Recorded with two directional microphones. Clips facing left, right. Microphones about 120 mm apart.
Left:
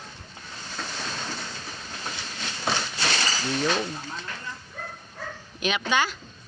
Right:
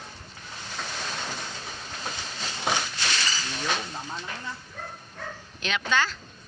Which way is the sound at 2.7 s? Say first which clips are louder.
Even; 15° right (ahead or behind).